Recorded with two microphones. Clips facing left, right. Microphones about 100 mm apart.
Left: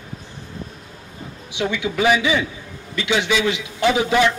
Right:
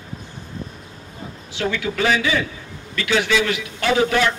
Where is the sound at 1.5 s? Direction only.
15° left (ahead or behind).